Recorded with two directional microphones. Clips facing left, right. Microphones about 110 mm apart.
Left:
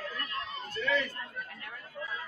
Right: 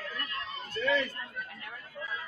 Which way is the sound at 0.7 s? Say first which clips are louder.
Right 2 dB; 40° right (ahead or behind).